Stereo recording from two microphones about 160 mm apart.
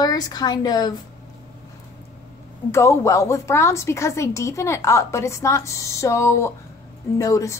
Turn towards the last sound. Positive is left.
turn(degrees=20)  # may be behind; listen again after turning